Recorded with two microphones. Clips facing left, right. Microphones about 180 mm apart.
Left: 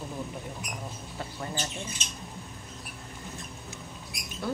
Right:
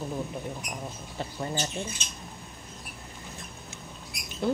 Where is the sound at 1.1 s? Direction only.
25° right (ahead or behind).